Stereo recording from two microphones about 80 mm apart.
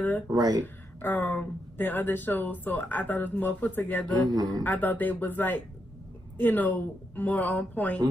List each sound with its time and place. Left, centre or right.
0.3 s speech: right
1.0 s speech: left
4.3 s speech: right
4.6 s speech: left